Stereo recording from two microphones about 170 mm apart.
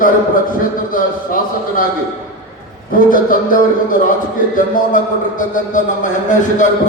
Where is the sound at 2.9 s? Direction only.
55° left (ahead or behind).